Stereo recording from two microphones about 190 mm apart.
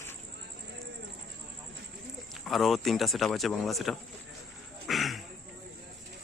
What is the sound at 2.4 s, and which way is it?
Speech, centre (ahead or behind).